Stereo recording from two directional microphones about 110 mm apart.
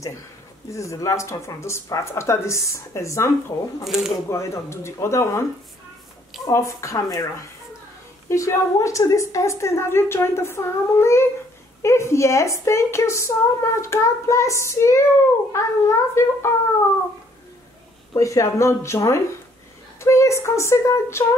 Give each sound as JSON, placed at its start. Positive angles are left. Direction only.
{"t": 0.7, "sound": "a woman's voice", "side_deg": 30}
{"t": 3.8, "sound": "speech", "side_deg": -5}
{"t": 4.3, "sound": "a woman's voice", "side_deg": 25}
{"t": 6.4, "sound": "a woman's voice", "side_deg": 30}
{"t": 18.1, "sound": "a woman's voice", "side_deg": 30}